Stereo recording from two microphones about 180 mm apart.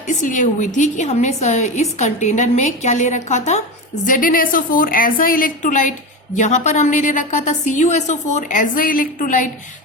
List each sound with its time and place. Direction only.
0.1 s a woman's voice: 45° left (ahead or behind)